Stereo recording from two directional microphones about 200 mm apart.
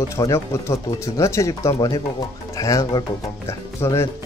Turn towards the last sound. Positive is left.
turn(degrees=15)  # may be behind; listen again after turning